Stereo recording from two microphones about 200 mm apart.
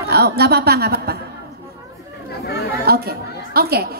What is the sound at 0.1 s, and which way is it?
A woman's voice, 55° right (ahead or behind).